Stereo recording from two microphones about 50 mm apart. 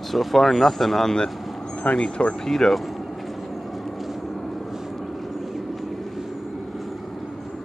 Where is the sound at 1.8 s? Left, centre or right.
Left.